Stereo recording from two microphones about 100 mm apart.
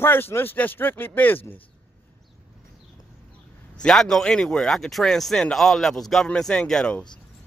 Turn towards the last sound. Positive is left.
turn(degrees=5)  # may be behind; listen again after turning